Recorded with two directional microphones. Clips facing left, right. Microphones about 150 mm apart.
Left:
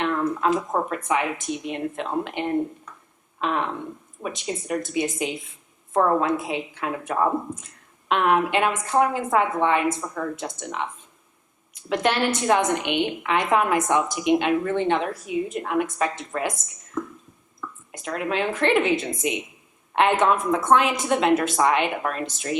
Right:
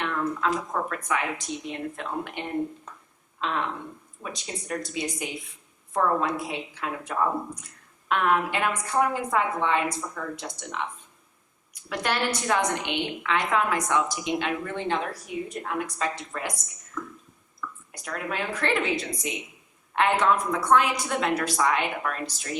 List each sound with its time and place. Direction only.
0.0 s a woman's voice: 20° left (ahead or behind)
4.2 s a woman's voice: 20° left (ahead or behind)